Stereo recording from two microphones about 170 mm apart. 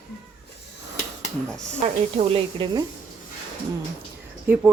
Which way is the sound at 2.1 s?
35° right (ahead or behind).